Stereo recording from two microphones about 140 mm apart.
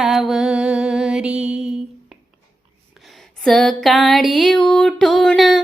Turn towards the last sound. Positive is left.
turn(degrees=0)  # may be behind; listen again after turning